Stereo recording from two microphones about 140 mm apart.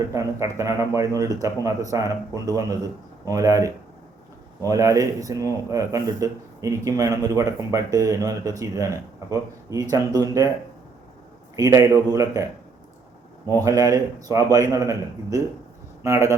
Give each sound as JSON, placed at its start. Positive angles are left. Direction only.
{"t": 0.1, "sound": "a man's voice", "side_deg": -20}
{"t": 11.5, "sound": "a man's voice", "side_deg": -25}
{"t": 13.7, "sound": "a man's voice", "side_deg": -25}